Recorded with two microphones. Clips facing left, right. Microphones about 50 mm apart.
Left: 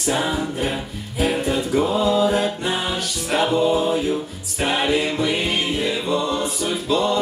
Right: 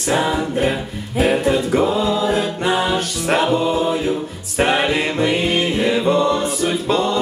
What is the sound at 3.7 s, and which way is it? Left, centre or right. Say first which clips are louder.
Mantra: right 1 dB; right.